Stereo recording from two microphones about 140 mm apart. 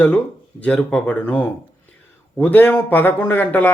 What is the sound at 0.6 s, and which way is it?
Speech, 10° left (ahead or behind).